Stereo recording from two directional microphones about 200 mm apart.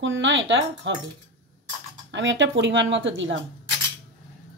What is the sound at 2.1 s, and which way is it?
Speech, 65° right (ahead or behind).